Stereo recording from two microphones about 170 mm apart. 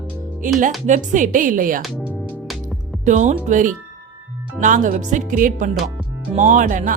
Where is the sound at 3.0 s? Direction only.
45° right (ahead or behind).